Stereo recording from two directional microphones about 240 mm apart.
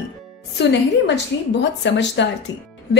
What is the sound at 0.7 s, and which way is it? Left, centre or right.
A woman's voice, left.